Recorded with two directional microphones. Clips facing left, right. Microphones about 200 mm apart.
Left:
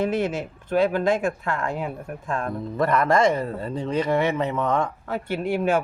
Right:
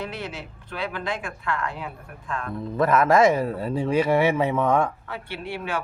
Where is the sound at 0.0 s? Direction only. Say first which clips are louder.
Left 9 dB; 50° left (ahead or behind).